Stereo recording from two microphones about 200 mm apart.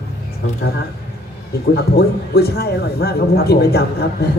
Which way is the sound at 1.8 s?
55° left (ahead or behind).